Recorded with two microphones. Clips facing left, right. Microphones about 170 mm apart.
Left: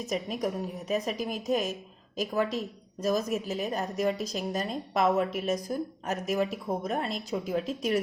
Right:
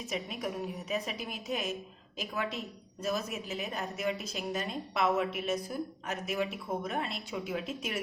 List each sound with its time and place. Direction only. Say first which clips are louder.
0.1 s a woman's voice: left 5 dB; 40° left (ahead or behind)